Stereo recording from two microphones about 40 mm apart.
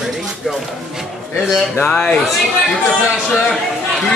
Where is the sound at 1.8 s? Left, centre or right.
Left.